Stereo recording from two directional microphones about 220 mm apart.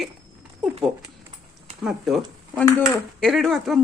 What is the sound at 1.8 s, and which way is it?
A woman's voice, centre (ahead or behind).